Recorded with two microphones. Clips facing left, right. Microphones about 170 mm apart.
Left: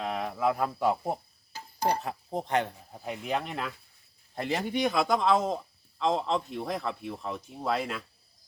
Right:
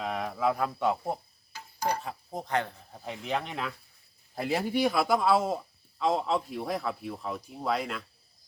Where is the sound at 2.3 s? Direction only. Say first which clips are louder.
Left 2 dB; 25° left (ahead or behind).